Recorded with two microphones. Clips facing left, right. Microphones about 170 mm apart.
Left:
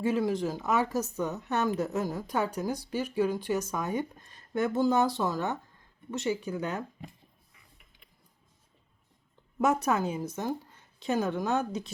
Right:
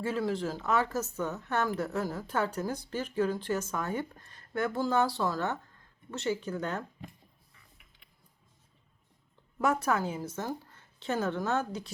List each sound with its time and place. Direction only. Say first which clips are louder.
0.0 s a woman's voice: left 3 dB; 15° left (ahead or behind)
9.6 s a woman's voice: left 2 dB; 20° left (ahead or behind)